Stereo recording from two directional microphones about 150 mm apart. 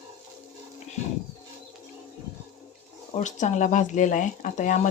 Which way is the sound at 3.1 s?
55° left (ahead or behind).